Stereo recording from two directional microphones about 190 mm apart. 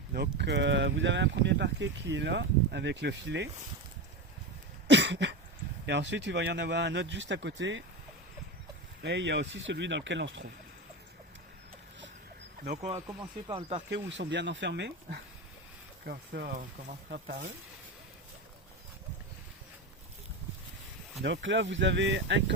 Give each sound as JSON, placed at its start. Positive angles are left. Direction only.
{"t": 0.1, "sound": "speech", "side_deg": -60}
{"t": 4.9, "sound": "cough", "side_deg": -65}
{"t": 5.8, "sound": "speech", "side_deg": -65}
{"t": 9.0, "sound": "speech", "side_deg": -65}
{"t": 12.7, "sound": "speech", "side_deg": -40}
{"t": 13.6, "sound": "speech", "side_deg": -30}
{"t": 13.9, "sound": "speech", "side_deg": -70}
{"t": 21.2, "sound": "speech", "side_deg": -70}